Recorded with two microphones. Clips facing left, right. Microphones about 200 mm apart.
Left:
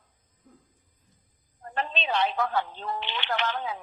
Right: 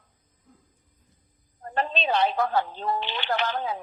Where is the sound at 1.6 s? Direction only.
40° right (ahead or behind).